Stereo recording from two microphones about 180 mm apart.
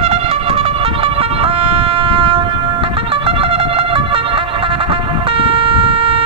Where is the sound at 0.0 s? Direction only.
35° right (ahead or behind).